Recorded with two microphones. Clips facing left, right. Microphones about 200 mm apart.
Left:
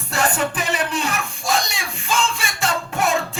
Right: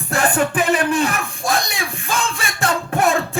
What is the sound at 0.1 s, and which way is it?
Music, 55° right (ahead or behind).